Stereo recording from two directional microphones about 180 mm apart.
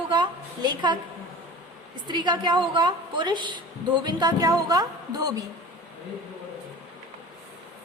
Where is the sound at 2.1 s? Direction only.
25° right (ahead or behind).